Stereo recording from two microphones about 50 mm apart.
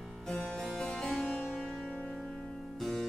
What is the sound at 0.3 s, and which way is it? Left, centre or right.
Harpsichord, centre.